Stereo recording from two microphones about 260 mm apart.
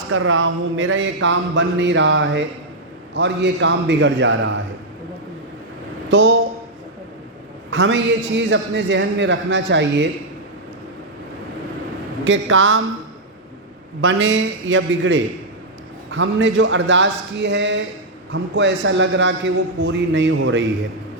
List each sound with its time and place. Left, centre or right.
0.1 s a man's voice: right
6.1 s a man's voice: right
7.7 s a man's voice: right
12.2 s a man's voice: right
14.0 s a man's voice: right